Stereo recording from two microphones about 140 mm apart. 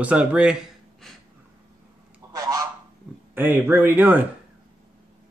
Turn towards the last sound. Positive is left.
turn(degrees=-15)  # may be behind; listen again after turning